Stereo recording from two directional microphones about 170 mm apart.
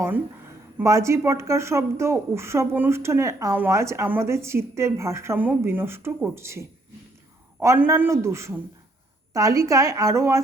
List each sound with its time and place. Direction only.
0.8 s a woman's voice: 15° right (ahead or behind)